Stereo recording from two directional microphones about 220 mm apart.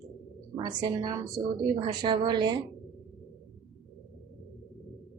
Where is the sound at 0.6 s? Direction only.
20° right (ahead or behind).